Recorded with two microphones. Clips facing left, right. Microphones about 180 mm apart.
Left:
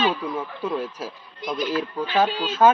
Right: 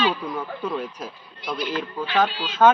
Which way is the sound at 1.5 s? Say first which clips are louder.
Left 3 dB; 45° left (ahead or behind).